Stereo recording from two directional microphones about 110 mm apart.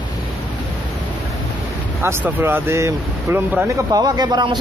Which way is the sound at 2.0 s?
20° right (ahead or behind).